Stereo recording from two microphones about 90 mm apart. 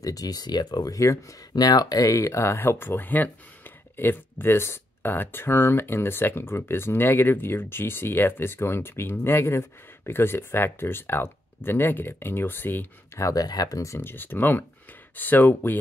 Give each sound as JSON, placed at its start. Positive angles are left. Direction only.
{"t": 0.0, "sound": "speech", "side_deg": 45}
{"t": 1.5, "sound": "speech", "side_deg": 50}
{"t": 13.2, "sound": "speech", "side_deg": 40}